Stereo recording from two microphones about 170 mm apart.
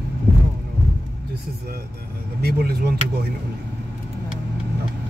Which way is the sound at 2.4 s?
65° right (ahead or behind).